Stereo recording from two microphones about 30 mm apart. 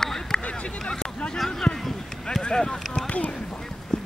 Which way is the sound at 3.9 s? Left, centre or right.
Left.